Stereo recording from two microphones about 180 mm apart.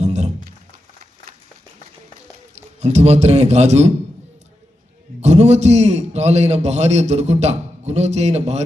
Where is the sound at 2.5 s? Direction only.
40° right (ahead or behind).